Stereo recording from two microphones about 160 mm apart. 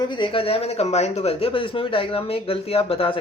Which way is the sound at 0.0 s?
30° left (ahead or behind).